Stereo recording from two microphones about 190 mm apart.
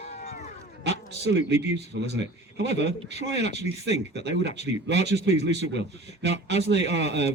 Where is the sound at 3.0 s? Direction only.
65° right (ahead or behind).